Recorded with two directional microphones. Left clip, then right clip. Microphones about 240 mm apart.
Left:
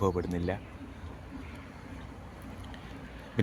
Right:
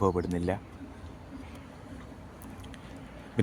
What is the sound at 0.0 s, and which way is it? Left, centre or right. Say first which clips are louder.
Speech: right 2 dB; centre.